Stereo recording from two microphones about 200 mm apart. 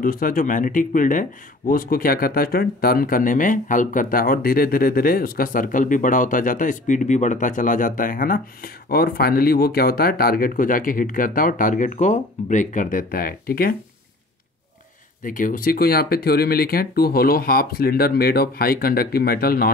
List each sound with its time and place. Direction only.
0.0 s speech: 45° left (ahead or behind)
15.2 s speech: 40° left (ahead or behind)